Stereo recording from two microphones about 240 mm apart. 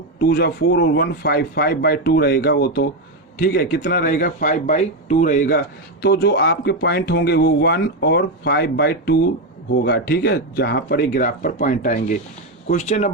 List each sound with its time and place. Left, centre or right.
0.2 s speech: left